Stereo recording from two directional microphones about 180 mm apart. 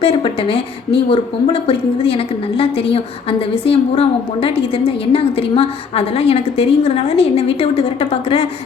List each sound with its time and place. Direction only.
0.0 s a woman's voice: 30° left (ahead or behind)